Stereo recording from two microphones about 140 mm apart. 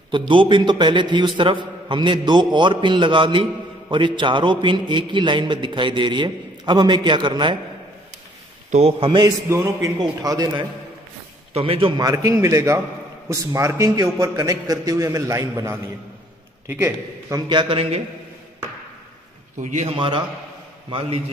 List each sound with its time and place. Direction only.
0.3 s a man's voice: 35° right (ahead or behind)
8.7 s a man's voice: 45° right (ahead or behind)
9.8 s a man's voice: 25° right (ahead or behind)
11.5 s a man's voice: 40° right (ahead or behind)
12.0 s a man's voice: 25° right (ahead or behind)
17.5 s a man's voice: 35° right (ahead or behind)
19.6 s a man's voice: 55° right (ahead or behind)
20.0 s a man's voice: 35° right (ahead or behind)